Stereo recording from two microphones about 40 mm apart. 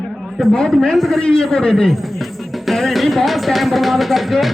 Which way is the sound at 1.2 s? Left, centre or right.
Centre.